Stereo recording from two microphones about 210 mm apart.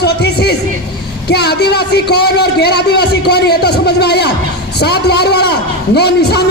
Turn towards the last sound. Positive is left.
turn(degrees=50)  # may be behind; listen again after turning